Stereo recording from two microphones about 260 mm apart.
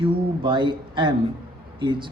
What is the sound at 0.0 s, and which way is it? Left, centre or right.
A man's voice, centre.